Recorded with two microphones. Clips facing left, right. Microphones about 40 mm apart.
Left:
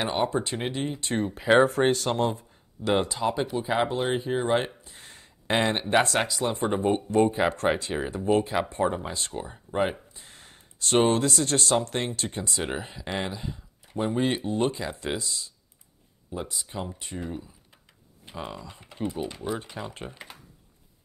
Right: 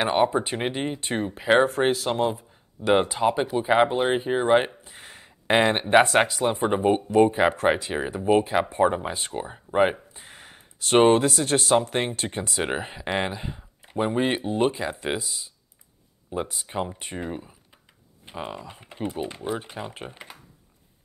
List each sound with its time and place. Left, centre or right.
0.2 s speech: centre
1.3 s speech: centre
3.0 s speech: right
18.2 s speech: centre